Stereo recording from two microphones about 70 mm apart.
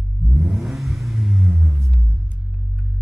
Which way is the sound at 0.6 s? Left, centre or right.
Centre.